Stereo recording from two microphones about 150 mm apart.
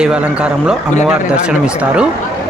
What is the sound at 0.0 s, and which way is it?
Speech, 5° right (ahead or behind).